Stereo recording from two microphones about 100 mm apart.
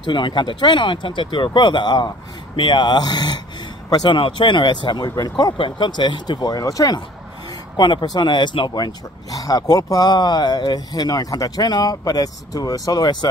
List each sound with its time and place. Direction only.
0.0 s speech: 50° left (ahead or behind)
7.7 s speech: 50° left (ahead or behind)